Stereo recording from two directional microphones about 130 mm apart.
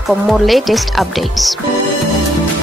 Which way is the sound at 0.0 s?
Centre (ahead or behind).